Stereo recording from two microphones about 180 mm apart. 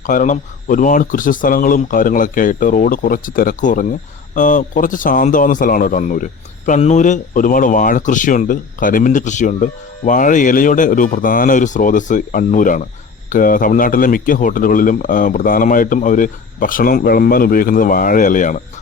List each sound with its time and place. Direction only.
0.0 s speech: 45° left (ahead or behind)